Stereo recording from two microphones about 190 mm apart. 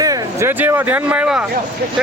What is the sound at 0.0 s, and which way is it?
Speech, 15° right (ahead or behind).